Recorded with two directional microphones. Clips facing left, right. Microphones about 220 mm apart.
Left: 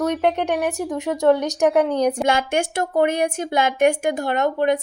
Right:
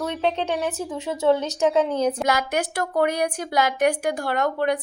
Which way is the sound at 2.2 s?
25° left (ahead or behind).